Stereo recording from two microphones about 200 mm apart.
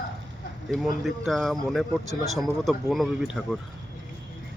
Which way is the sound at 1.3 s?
Centre (ahead or behind).